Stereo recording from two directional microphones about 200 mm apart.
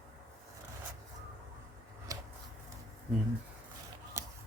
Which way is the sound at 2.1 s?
15° right (ahead or behind).